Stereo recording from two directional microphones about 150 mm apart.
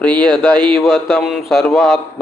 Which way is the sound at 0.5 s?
30° right (ahead or behind).